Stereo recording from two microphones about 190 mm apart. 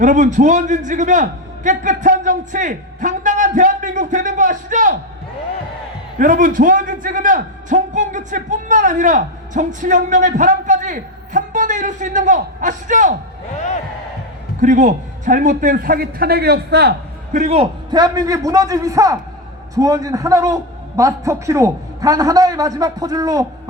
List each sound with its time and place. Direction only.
0.0 s a man's voice: 40° right (ahead or behind)
6.1 s a man's voice: 45° right (ahead or behind)
14.6 s a man's voice: 40° right (ahead or behind); by 16.9 s 60° right (ahead or behind)
17.3 s a man's voice: 35° right (ahead or behind)
17.9 s a man's voice: 20° right (ahead or behind)